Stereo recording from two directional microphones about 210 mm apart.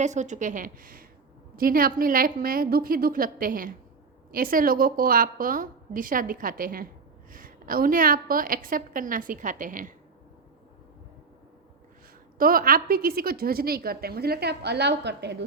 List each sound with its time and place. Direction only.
0.0 s a woman's voice: 35° right (ahead or behind)
12.4 s a woman's voice: 45° right (ahead or behind)